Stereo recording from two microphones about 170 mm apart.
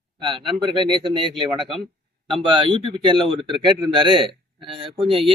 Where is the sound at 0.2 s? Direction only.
30° right (ahead or behind).